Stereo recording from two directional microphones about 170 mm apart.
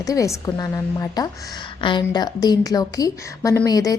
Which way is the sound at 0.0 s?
20° left (ahead or behind).